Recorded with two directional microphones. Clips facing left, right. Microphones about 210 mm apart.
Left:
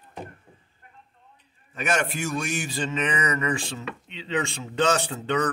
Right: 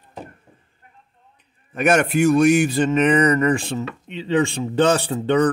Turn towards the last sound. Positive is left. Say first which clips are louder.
# right 7 dB
turn(degrees=-35)  # may be behind; listen again after turning